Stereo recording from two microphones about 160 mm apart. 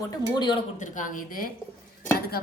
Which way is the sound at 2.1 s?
70° left (ahead or behind).